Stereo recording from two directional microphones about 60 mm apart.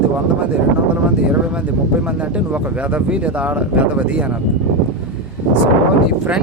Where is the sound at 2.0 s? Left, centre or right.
Right.